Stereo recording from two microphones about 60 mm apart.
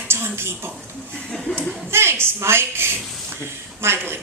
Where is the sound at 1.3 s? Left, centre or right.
Centre.